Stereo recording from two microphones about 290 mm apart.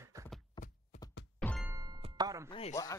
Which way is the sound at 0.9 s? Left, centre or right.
Left.